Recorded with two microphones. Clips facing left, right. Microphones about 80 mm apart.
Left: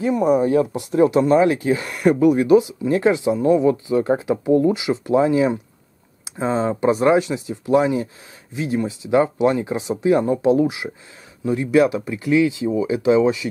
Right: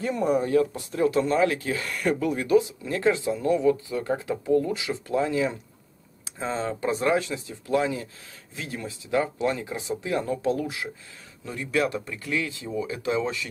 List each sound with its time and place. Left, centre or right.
0.0 s speech: centre
0.5 s speech: left